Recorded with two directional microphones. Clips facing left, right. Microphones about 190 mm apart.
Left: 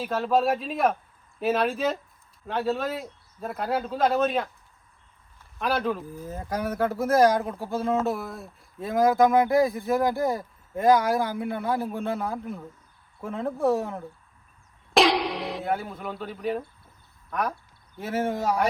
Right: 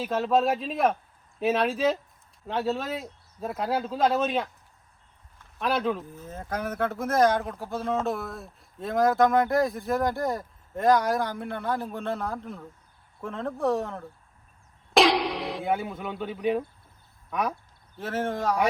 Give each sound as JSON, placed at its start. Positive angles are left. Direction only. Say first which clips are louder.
{"t": 0.0, "sound": "speech", "louder": "even", "side_deg": 0}
{"t": 5.5, "sound": "speech", "louder": "even", "side_deg": 0}
{"t": 6.1, "sound": "speech", "louder": "left 2 dB", "side_deg": 10}
{"t": 17.9, "sound": "speech", "louder": "left 2 dB", "side_deg": 10}